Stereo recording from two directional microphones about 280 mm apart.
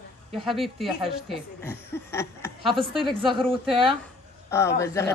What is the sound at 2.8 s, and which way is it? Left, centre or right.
Speech, centre.